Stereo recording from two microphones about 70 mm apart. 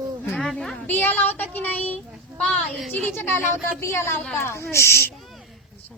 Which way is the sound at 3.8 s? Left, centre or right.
Left.